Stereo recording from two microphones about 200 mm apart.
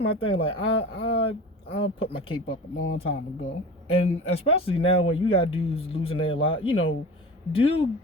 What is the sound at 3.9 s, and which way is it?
Speech, 30° left (ahead or behind).